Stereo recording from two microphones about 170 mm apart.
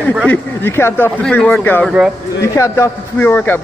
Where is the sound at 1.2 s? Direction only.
Centre (ahead or behind).